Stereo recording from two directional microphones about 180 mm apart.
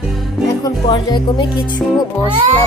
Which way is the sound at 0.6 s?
25° left (ahead or behind).